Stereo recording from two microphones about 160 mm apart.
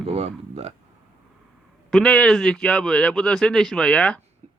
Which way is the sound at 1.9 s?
5° left (ahead or behind).